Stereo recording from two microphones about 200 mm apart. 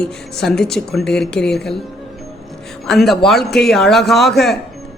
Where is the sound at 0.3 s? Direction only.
Centre (ahead or behind).